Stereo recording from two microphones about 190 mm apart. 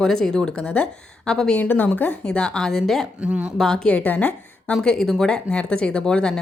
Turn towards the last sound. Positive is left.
turn(degrees=5)  # may be behind; listen again after turning